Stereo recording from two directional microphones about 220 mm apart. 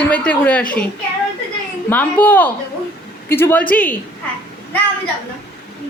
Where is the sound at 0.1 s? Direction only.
5° left (ahead or behind).